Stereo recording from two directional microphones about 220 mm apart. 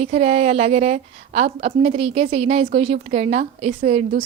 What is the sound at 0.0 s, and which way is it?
A woman's voice, 30° right (ahead or behind).